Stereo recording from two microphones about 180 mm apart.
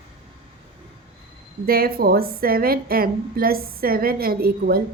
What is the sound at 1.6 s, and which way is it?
A woman's voice, 55° right (ahead or behind).